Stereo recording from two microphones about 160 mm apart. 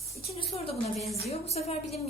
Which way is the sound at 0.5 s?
35° left (ahead or behind).